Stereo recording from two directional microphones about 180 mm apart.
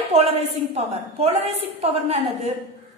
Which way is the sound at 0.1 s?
35° right (ahead or behind).